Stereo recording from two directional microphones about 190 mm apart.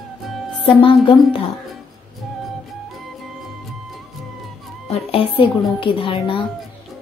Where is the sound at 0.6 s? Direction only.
25° left (ahead or behind).